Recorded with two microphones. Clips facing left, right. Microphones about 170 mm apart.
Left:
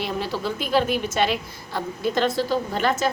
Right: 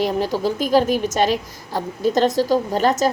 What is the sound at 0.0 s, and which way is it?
A woman's voice, 40° right (ahead or behind).